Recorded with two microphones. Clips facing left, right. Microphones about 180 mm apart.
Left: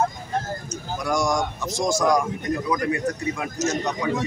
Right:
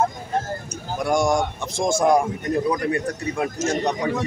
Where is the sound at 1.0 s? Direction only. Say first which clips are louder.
Right 3 dB; 25° right (ahead or behind).